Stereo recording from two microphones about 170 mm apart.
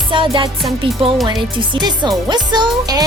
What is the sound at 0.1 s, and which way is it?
Speech, 30° right (ahead or behind).